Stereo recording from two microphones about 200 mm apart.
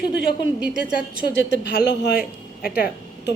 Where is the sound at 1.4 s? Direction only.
65° left (ahead or behind).